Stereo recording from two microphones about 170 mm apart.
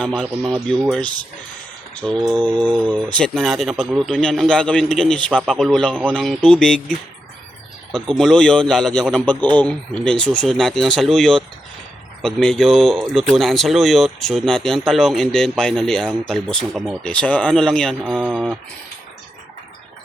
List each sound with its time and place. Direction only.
0.0 s speech: 5° left (ahead or behind)
2.0 s mantra: 5° left (ahead or behind)
3.1 s speech: 5° left (ahead or behind)
8.1 s speech: 5° left (ahead or behind)